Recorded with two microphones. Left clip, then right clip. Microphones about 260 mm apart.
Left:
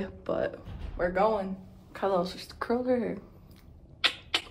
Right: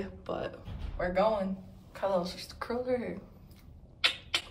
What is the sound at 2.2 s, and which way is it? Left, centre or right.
Speech, centre.